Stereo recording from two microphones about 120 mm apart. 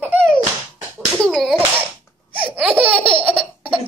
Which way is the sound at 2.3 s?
15° right (ahead or behind).